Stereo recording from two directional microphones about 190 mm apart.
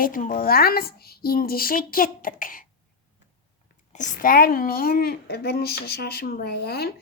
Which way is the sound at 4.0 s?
45° left (ahead or behind).